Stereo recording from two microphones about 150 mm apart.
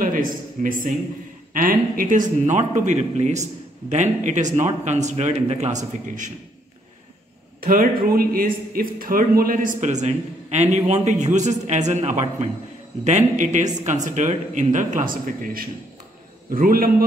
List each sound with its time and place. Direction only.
0.0 s a man's voice: 65° right (ahead or behind)
7.6 s a man's voice: 70° right (ahead or behind)